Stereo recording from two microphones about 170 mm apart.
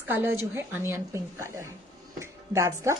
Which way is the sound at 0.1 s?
15° right (ahead or behind).